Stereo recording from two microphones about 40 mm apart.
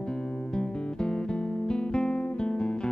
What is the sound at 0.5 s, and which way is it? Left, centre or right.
Music, left.